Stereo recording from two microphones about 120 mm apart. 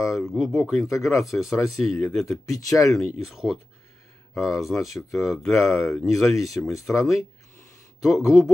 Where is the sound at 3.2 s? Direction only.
Centre (ahead or behind).